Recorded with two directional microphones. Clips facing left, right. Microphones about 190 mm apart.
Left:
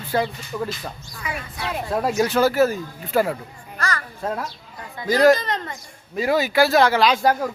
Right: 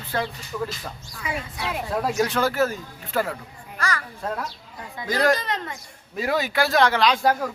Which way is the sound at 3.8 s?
10° right (ahead or behind).